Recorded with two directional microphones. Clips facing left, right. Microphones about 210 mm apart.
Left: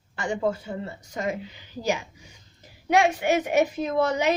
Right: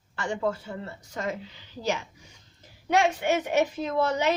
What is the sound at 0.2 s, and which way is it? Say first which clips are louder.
Speech: left 2 dB; 15° left (ahead or behind).